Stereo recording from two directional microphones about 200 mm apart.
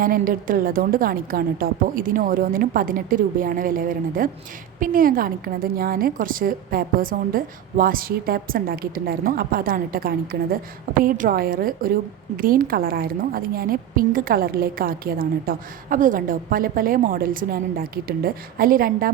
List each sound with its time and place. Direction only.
0.0 s a woman's voice: 45° right (ahead or behind)